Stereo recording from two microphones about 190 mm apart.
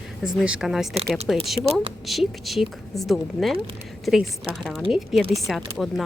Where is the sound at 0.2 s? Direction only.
5° right (ahead or behind).